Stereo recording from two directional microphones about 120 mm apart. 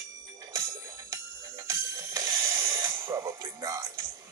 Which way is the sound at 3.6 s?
30° right (ahead or behind).